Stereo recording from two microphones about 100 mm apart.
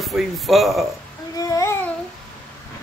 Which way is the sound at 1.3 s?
35° left (ahead or behind).